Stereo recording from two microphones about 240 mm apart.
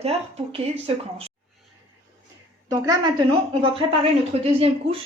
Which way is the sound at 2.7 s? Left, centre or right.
Centre.